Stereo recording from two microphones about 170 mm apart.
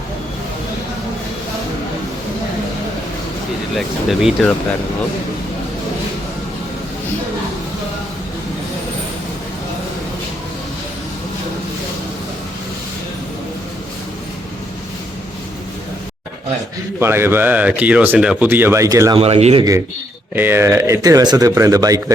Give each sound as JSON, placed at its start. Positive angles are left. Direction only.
{"t": 3.8, "sound": "speech", "side_deg": 0}
{"t": 17.0, "sound": "speech", "side_deg": -15}
{"t": 19.1, "sound": "speech", "side_deg": -35}
{"t": 20.3, "sound": "speech", "side_deg": -15}